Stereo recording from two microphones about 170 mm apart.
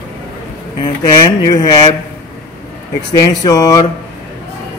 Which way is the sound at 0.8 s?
25° left (ahead or behind).